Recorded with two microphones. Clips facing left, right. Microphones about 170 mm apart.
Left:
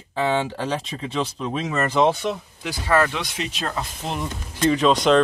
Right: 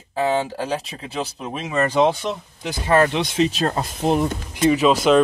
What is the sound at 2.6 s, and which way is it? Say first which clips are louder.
Speech: right 3 dB; 20° right (ahead or behind).